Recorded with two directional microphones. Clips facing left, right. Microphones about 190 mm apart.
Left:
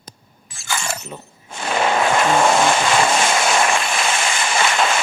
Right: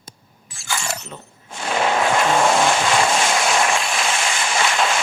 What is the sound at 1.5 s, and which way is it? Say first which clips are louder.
Vehicle: left 1 dB; centre (ahead or behind).